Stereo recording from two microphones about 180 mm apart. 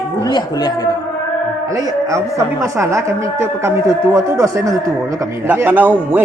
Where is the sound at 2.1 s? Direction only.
15° right (ahead or behind).